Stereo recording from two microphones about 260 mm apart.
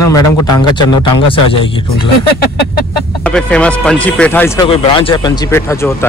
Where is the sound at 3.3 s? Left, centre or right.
Centre.